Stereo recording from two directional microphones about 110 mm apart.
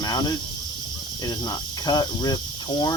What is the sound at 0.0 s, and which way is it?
Snake, 40° left (ahead or behind).